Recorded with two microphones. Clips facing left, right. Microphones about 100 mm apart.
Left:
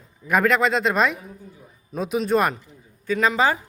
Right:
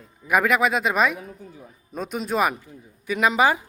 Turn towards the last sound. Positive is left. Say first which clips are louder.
# even
turn(degrees=-15)  # may be behind; listen again after turning